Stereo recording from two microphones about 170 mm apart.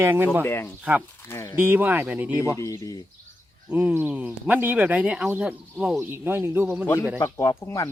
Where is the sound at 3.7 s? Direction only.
10° right (ahead or behind).